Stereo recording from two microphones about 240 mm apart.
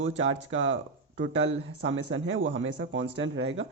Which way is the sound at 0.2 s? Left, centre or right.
Right.